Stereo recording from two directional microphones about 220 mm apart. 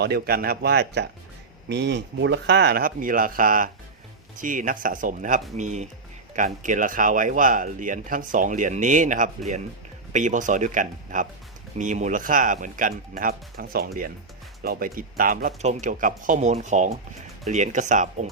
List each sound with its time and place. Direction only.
0.0 s speech: 45° right (ahead or behind)